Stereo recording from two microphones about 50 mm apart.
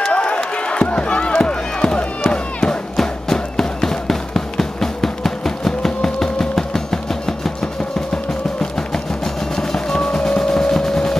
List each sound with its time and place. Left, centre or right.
0.0 s run: left
8.5 s percussion: centre